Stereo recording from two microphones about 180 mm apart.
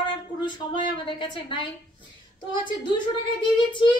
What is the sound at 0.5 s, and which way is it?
A woman's voice, 25° left (ahead or behind).